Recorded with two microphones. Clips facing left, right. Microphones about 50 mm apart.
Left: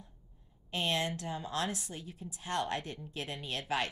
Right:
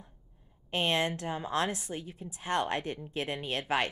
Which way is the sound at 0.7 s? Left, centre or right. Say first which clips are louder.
Right 4 dB; right.